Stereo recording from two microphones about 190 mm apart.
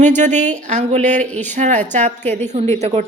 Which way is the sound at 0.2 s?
40° right (ahead or behind).